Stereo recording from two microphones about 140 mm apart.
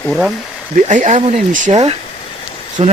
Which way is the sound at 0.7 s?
60° right (ahead or behind).